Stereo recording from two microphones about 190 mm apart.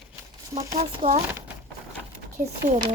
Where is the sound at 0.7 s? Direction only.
40° right (ahead or behind).